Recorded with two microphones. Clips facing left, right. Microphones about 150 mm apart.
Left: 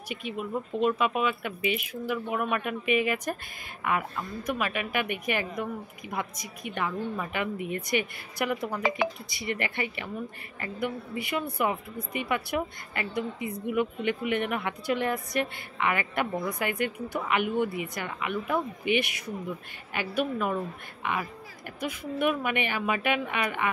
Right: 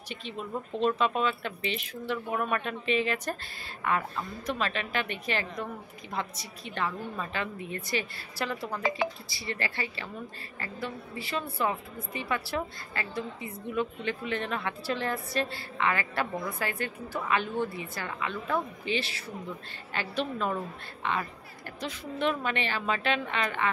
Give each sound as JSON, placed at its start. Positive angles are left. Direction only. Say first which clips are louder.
{"t": 0.1, "sound": "a woman's voice", "louder": "left 4 dB", "side_deg": 10}
{"t": 8.8, "sound": "speech", "louder": "left 1 dB", "side_deg": 75}
{"t": 9.3, "sound": "a woman's voice", "louder": "left 3 dB", "side_deg": 20}